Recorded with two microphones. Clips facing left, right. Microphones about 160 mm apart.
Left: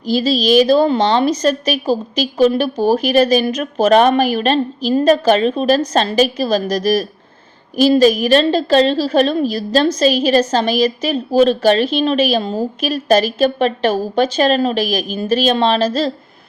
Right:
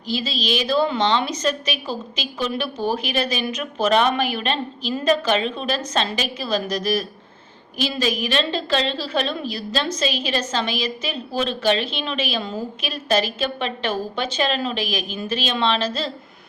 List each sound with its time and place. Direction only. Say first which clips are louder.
0.0 s a woman's voice: left 10 dB; 40° left (ahead or behind)